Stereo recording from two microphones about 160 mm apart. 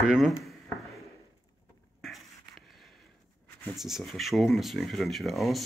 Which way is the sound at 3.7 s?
Centre (ahead or behind).